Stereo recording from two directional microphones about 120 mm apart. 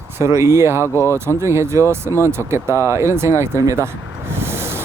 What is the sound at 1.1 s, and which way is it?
Speech, 20° right (ahead or behind).